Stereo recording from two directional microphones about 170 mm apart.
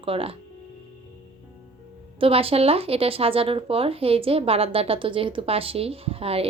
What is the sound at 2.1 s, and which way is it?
Speech, 35° right (ahead or behind).